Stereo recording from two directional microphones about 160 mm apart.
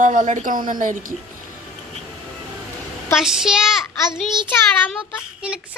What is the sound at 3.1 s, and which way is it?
Speech, 5° right (ahead or behind).